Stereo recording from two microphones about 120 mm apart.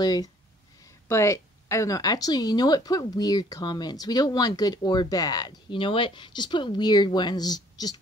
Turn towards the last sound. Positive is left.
turn(degrees=35)  # may be behind; listen again after turning